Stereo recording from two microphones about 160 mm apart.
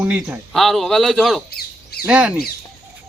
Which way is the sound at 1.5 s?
70° left (ahead or behind).